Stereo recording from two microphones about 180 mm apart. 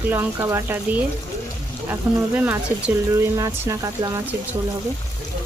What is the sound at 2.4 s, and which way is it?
Speech, 10° right (ahead or behind).